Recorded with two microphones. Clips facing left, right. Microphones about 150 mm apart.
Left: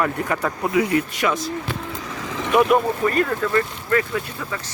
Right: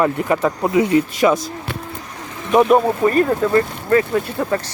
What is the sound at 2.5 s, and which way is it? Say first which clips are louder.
Speech: right 4 dB; 35° right (ahead or behind).